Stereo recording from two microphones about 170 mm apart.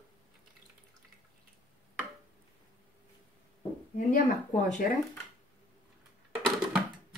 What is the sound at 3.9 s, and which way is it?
Speech, 50° left (ahead or behind).